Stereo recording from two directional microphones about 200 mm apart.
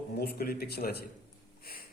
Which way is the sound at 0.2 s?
50° left (ahead or behind).